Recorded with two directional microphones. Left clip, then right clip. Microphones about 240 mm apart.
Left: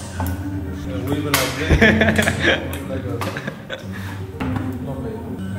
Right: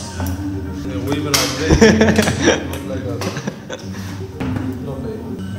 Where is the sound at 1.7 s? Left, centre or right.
Centre.